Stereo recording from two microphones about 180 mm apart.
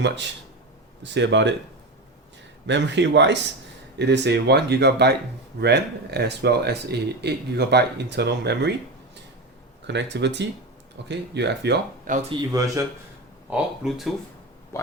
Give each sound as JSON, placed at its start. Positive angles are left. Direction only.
{"t": 1.0, "sound": "speech", "side_deg": -80}
{"t": 2.6, "sound": "speech", "side_deg": -80}
{"t": 9.8, "sound": "speech", "side_deg": -75}
{"t": 12.3, "sound": "speech", "side_deg": -20}
{"t": 13.5, "sound": "speech", "side_deg": 0}
{"t": 14.7, "sound": "speech", "side_deg": 15}